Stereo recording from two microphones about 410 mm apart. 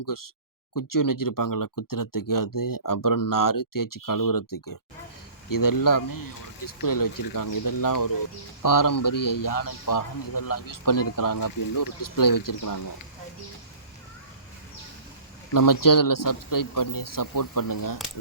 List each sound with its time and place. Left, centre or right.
0.0 s a man's voice: left
15.5 s a man's voice: left